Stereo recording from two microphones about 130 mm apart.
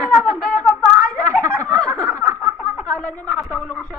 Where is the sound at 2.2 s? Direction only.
5° left (ahead or behind).